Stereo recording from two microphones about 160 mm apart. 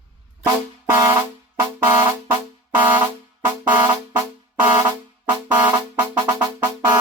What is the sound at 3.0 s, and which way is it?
Music, 10° right (ahead or behind).